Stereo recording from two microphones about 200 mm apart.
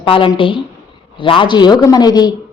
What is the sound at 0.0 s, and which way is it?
Speech, 25° left (ahead or behind).